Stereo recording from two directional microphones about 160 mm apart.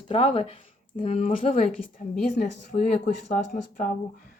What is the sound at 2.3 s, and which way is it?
Speech, 55° left (ahead or behind).